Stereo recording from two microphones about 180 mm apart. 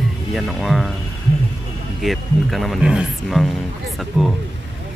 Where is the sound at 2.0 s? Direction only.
Centre (ahead or behind).